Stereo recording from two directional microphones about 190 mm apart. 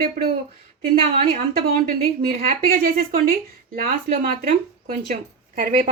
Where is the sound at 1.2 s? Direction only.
50° right (ahead or behind).